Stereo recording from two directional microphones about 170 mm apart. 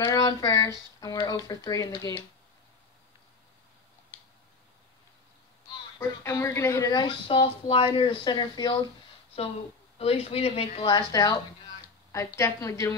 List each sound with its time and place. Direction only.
0.0 s speech: 20° left (ahead or behind)
5.9 s speech: 15° left (ahead or behind)
9.9 s a woman's voice: 35° left (ahead or behind); by 12.9 s 15° left (ahead or behind)